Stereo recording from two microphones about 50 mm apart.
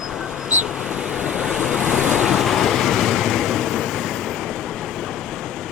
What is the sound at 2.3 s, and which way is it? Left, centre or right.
Vehicle, centre.